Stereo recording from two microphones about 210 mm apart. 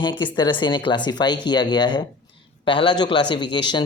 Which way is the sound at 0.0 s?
20° left (ahead or behind).